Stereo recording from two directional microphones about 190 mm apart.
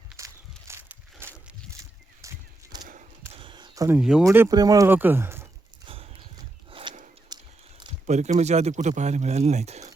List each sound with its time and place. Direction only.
0.2 s walk: 15° right (ahead or behind)
0.7 s a sound: 10° right (ahead or behind)
1.7 s walk: 15° right (ahead or behind)
2.8 s horse: 45° right (ahead or behind)
3.3 s a sound: 25° right (ahead or behind)
3.8 s speech: 5° right (ahead or behind)
4.2 s speech: 15° right (ahead or behind)
5.8 s horse: 30° right (ahead or behind)
6.7 s a sound: 30° right (ahead or behind)
8.0 s speech: 35° right (ahead or behind)